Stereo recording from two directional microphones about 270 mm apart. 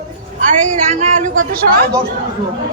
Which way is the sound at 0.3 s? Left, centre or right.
Right.